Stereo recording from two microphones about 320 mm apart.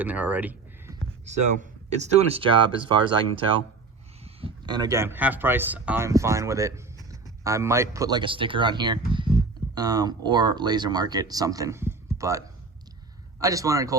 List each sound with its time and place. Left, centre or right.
0.0 s speech: centre
1.2 s speech: right
13.4 s speech: centre